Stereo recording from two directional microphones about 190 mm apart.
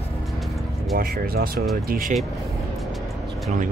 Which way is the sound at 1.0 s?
50° right (ahead or behind).